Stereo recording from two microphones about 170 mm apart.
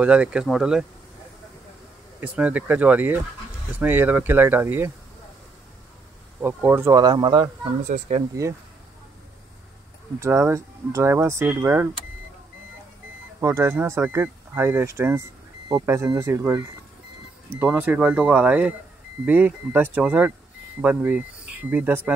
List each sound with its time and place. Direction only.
0.0 s speech: 5° right (ahead or behind)
2.1 s speech: 10° right (ahead or behind)
6.4 s speech: 15° right (ahead or behind)
10.2 s speech: 15° right (ahead or behind)
13.4 s speech: 15° right (ahead or behind)